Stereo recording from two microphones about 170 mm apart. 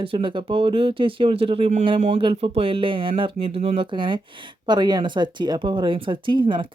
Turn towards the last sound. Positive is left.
turn(degrees=-30)  # may be behind; listen again after turning